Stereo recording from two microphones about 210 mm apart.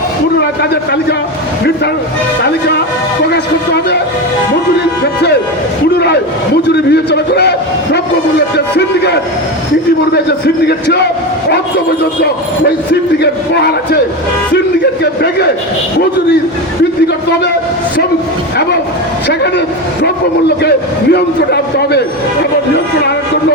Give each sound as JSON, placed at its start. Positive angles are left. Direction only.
{"t": 2.4, "sound": "a man's voice", "side_deg": 50}
{"t": 6.7, "sound": "a man's voice", "side_deg": 50}
{"t": 8.5, "sound": "a man's voice", "side_deg": 55}
{"t": 13.6, "sound": "a man's voice", "side_deg": 50}
{"t": 15.0, "sound": "a man's voice", "side_deg": 50}
{"t": 19.3, "sound": "a man's voice", "side_deg": 55}